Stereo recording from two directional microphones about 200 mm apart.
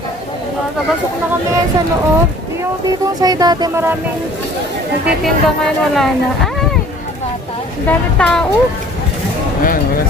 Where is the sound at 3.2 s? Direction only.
20° right (ahead or behind).